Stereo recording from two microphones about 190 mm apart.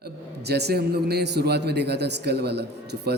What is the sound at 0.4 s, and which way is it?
A man's voice, 60° right (ahead or behind).